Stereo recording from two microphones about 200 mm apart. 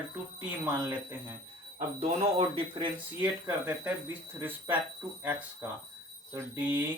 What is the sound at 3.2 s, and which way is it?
Speech, 10° right (ahead or behind).